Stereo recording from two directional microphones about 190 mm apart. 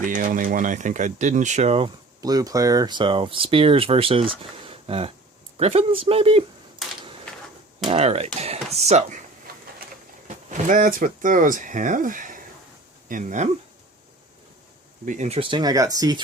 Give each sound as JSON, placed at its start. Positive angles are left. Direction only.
{"t": 0.0, "sound": "speech", "side_deg": -45}
{"t": 7.9, "sound": "speech", "side_deg": -35}
{"t": 10.2, "sound": "speech", "side_deg": -40}
{"t": 15.0, "sound": "speech", "side_deg": -40}